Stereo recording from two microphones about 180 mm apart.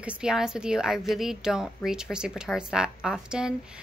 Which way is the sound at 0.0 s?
5° right (ahead or behind).